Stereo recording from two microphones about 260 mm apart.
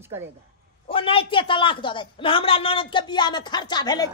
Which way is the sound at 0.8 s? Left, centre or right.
Left.